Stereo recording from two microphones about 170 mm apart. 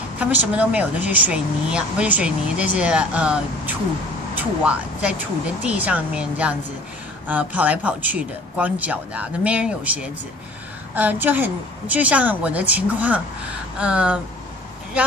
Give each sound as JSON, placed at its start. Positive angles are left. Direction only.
{"t": 0.2, "sound": "speech", "side_deg": -10}